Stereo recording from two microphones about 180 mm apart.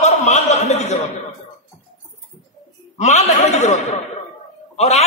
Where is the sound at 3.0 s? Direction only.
40° left (ahead or behind).